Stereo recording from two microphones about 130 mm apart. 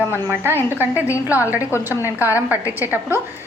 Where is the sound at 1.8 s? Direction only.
15° right (ahead or behind).